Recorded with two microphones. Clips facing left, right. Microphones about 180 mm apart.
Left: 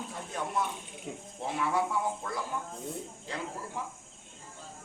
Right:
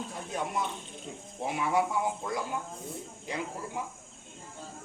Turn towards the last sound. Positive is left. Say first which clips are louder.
# right 3 dB
turn(degrees=-15)  # may be behind; listen again after turning